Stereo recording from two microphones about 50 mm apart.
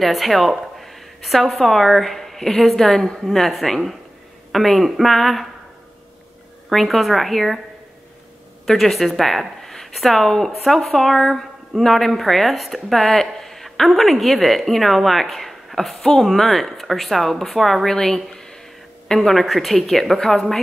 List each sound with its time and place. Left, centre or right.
0.0 s a woman's voice: centre
6.7 s a woman's voice: centre
8.6 s a woman's voice: centre